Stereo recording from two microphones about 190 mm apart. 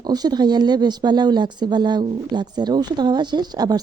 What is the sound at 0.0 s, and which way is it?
Speech, 20° right (ahead or behind).